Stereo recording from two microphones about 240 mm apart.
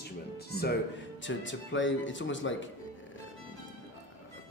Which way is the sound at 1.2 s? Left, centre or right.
Left.